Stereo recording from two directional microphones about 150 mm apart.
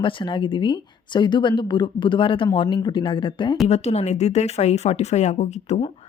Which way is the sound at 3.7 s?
45° left (ahead or behind).